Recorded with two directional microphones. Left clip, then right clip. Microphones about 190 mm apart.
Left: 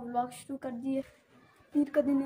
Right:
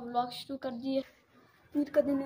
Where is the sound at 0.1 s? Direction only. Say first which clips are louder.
Even; 20° left (ahead or behind).